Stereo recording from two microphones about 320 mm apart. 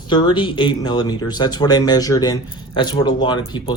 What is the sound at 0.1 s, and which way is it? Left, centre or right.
Speech, centre.